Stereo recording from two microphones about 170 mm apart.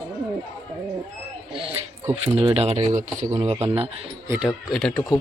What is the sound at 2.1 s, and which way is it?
Speech, 35° right (ahead or behind).